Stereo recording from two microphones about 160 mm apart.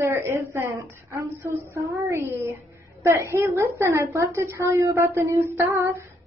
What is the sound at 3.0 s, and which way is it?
A woman's voice, 15° right (ahead or behind).